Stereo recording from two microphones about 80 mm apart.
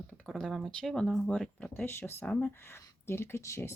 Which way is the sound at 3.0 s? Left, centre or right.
Left.